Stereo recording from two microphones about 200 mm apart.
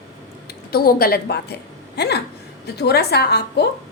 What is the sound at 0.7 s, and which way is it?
A woman's voice, 50° left (ahead or behind).